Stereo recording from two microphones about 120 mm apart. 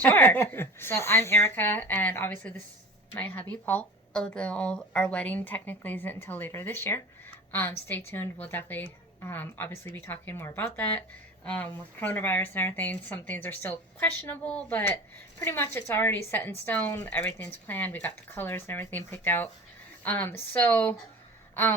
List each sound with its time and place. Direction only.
0.0 s a woman's voice: 15° left (ahead or behind)